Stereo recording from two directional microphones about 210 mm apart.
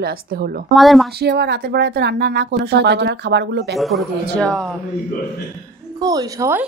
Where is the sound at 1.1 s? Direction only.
50° right (ahead or behind).